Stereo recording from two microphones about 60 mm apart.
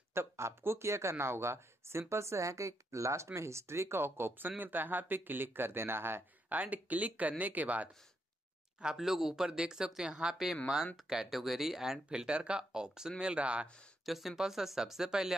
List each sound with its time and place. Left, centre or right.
0.1 s speech: right
8.8 s speech: centre
10.3 s speech: centre
14.0 s speech: centre